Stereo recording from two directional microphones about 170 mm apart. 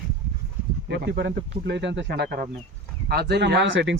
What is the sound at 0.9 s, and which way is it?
Speech, 75° right (ahead or behind).